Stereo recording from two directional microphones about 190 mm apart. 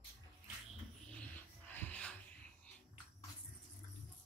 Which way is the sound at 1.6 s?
10° left (ahead or behind).